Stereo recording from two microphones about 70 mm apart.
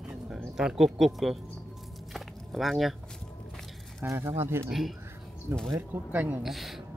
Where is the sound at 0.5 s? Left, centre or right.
Centre.